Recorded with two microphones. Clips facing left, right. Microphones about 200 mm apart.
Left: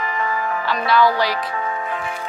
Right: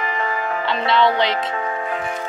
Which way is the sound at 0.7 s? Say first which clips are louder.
Left 1 dB; 25° right (ahead or behind).